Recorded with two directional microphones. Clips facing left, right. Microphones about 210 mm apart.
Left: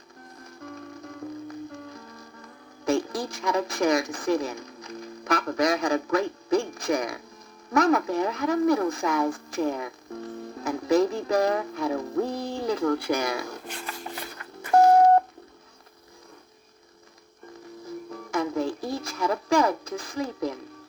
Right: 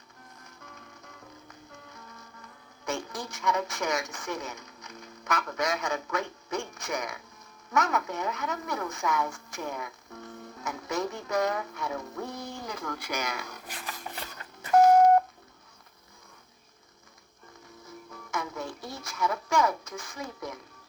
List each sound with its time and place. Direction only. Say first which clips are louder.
1.9 s music: left 7 dB; 35° left (ahead or behind)
2.8 s speech: left 9 dB; 35° left (ahead or behind)
14.3 s a sound: left 2 dB; 35° left (ahead or behind)
17.8 s music: left 10 dB; 35° left (ahead or behind)